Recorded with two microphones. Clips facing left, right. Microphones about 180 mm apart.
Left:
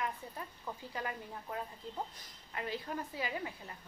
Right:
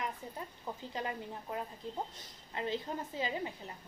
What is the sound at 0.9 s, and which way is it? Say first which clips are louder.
A woman's voice: right 2 dB; 25° right (ahead or behind).